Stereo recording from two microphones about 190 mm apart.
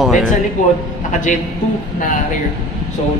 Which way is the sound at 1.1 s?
40° left (ahead or behind).